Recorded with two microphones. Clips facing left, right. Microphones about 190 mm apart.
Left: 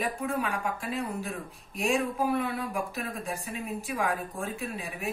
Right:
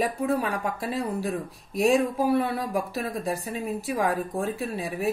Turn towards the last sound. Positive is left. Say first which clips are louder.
# right 6 dB
turn(degrees=-35)  # may be behind; listen again after turning